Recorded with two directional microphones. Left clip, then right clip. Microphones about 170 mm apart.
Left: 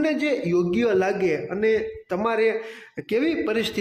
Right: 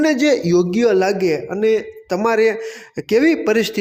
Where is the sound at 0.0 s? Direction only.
35° right (ahead or behind).